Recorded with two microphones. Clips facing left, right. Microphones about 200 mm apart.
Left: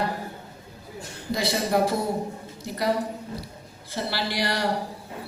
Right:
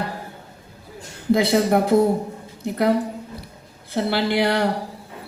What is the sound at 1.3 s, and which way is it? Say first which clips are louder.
A man's voice: right 8 dB; 55° right (ahead or behind).